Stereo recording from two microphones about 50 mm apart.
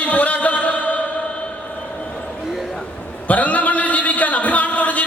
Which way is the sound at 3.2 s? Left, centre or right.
Left.